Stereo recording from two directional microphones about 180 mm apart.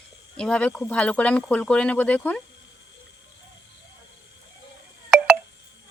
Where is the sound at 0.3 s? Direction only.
5° left (ahead or behind).